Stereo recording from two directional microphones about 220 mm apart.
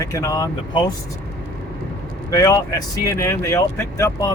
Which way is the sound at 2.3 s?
15° left (ahead or behind).